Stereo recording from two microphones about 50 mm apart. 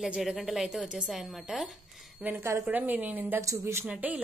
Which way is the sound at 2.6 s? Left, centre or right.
Right.